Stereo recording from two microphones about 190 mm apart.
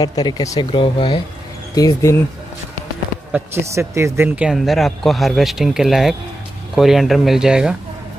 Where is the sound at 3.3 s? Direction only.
15° right (ahead or behind).